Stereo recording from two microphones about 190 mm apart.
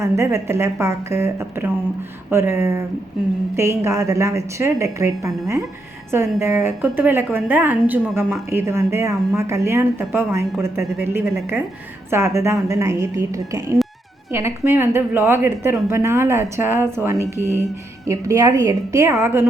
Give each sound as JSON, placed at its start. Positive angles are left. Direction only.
{"t": 0.0, "sound": "a woman's voice", "side_deg": -15}